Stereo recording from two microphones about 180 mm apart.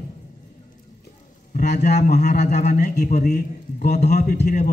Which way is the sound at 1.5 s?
65° left (ahead or behind).